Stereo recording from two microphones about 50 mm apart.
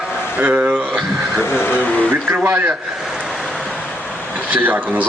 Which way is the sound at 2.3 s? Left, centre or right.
Right.